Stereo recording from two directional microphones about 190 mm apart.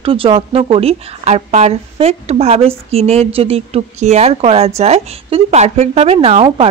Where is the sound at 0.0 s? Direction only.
30° right (ahead or behind).